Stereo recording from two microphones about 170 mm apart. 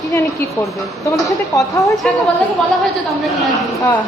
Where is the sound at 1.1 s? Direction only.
20° left (ahead or behind).